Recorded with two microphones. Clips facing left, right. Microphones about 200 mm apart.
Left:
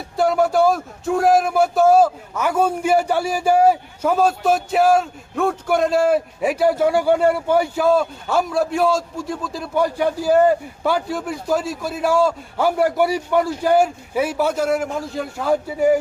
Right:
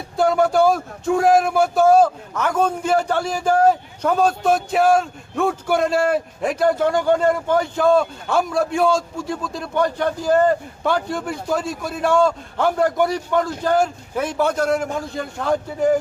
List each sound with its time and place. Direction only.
0.2 s speech: centre (ahead or behind)